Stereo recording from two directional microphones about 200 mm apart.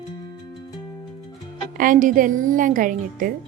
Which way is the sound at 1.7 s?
40° right (ahead or behind).